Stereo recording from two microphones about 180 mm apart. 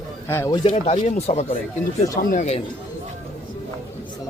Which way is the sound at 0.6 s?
35° left (ahead or behind).